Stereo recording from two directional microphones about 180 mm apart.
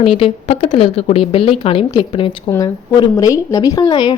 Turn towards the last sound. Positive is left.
turn(degrees=25)  # may be behind; listen again after turning